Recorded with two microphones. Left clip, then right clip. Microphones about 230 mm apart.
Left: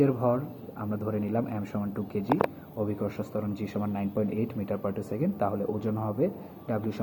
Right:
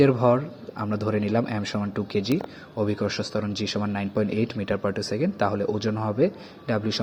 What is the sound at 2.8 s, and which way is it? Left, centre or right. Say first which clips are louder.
A man's voice: right 6 dB; right.